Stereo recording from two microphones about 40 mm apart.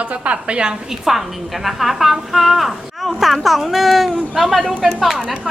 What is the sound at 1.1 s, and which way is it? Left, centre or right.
A woman's voice, centre.